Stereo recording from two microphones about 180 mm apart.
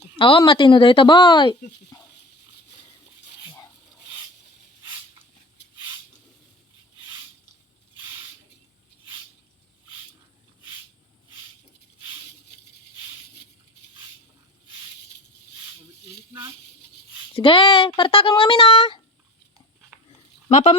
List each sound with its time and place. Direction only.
0.2 s speech: 30° left (ahead or behind)
1.9 s dog: 20° left (ahead or behind)
17.3 s speech: 30° left (ahead or behind)
20.5 s speech: 35° left (ahead or behind)